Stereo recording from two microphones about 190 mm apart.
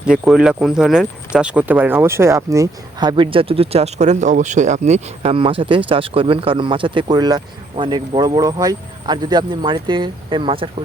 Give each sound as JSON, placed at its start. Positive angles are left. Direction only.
{"t": 0.0, "sound": "speech", "side_deg": -5}